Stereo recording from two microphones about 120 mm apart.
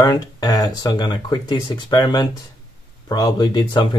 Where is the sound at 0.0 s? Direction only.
30° left (ahead or behind).